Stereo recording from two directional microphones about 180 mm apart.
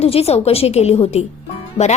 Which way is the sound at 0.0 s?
35° left (ahead or behind).